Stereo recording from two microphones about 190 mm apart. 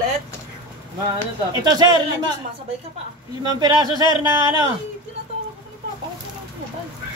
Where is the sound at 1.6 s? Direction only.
20° right (ahead or behind).